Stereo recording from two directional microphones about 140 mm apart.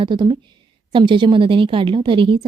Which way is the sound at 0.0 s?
35° right (ahead or behind).